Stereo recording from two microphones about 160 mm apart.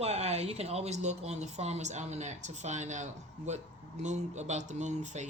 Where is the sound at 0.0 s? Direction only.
40° right (ahead or behind).